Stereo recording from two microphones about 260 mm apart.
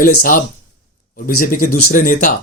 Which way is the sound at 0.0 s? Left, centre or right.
Left.